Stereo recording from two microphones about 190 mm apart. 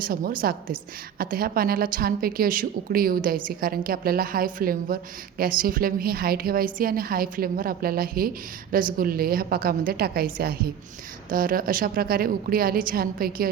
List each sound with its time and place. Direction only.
0.0 s a woman's voice: 50° right (ahead or behind)